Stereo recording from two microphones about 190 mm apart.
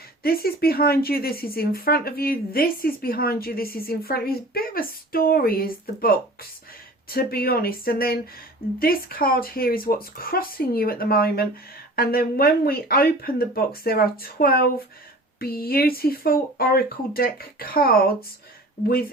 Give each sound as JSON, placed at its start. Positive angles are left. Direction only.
{"t": 0.2, "sound": "speech", "side_deg": 55}